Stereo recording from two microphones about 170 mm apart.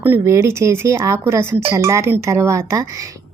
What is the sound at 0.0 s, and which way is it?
A woman's voice, 15° right (ahead or behind).